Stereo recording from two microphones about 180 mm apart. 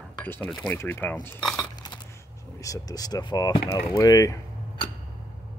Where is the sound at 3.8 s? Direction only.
20° left (ahead or behind).